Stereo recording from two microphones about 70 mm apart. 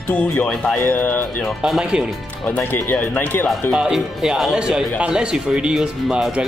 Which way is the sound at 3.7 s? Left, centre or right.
Centre.